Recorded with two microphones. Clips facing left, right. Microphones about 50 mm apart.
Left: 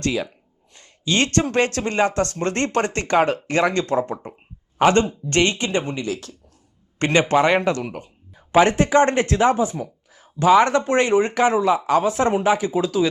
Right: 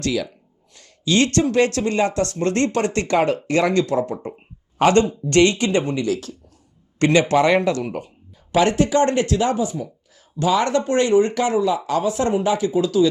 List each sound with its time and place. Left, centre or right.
0.0 s speech: left
4.8 s speech: left